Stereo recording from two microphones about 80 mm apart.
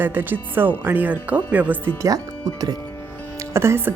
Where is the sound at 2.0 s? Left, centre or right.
Right.